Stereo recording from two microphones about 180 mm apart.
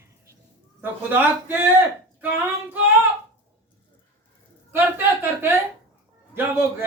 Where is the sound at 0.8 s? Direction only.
10° right (ahead or behind).